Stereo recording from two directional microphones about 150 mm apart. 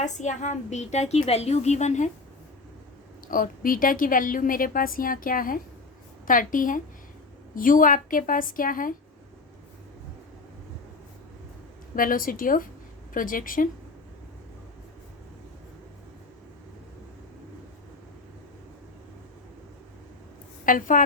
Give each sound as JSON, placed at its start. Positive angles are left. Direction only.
{"t": 0.0, "sound": "a woman's voice", "side_deg": 55}
{"t": 3.2, "sound": "a woman's voice", "side_deg": 70}
{"t": 11.9, "sound": "a woman's voice", "side_deg": 70}
{"t": 20.7, "sound": "a woman's voice", "side_deg": 60}